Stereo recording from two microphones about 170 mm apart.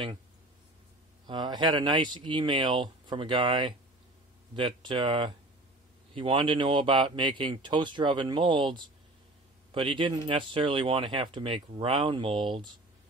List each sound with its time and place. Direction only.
1.2 s speech: 25° right (ahead or behind)